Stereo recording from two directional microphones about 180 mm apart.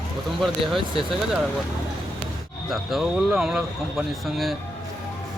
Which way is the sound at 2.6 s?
Centre (ahead or behind).